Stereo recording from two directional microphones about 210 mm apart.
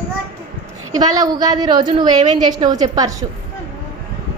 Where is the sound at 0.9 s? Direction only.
20° right (ahead or behind).